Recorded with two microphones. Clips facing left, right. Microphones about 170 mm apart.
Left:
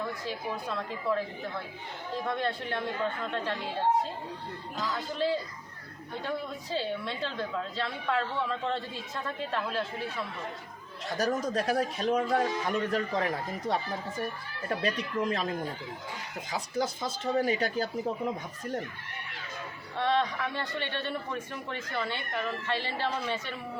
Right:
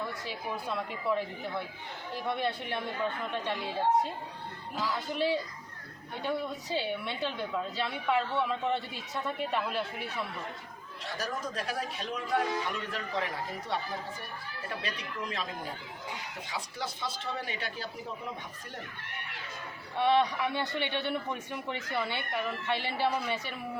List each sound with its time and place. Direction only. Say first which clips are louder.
0.5 s a woman's voice: even; 10° right (ahead or behind)
2.3 s a woman's voice: right 1 dB; 10° right (ahead or behind)
4.8 s a woman's voice: right 1 dB; 10° right (ahead or behind)
6.7 s a woman's voice: left 1 dB; 15° right (ahead or behind)
11.2 s a man's voice: left 8 dB; 45° left (ahead or behind)
16.5 s speech: left 8 dB; 40° left (ahead or behind)
20.0 s a woman's voice: right 2 dB; 10° right (ahead or behind)